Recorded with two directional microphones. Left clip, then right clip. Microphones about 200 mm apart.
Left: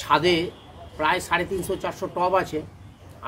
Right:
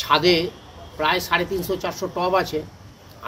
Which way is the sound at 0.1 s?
15° left (ahead or behind).